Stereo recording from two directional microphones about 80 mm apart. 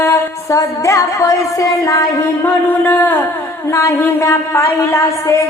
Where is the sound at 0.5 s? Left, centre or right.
Left.